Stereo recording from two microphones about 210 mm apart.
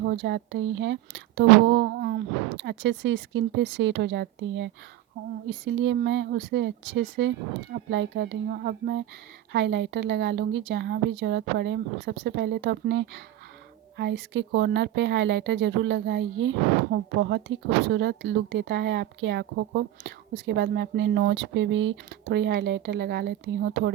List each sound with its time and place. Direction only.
0.0 s speech: 55° right (ahead or behind)